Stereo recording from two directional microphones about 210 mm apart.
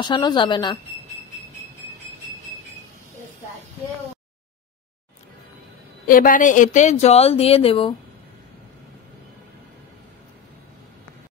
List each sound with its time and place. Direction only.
0.0 s a woman's voice: 20° left (ahead or behind)
6.0 s speech: 40° left (ahead or behind); by 7.9 s 25° left (ahead or behind)